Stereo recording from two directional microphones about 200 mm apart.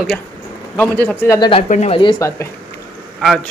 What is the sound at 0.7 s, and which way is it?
Speech, 10° left (ahead or behind).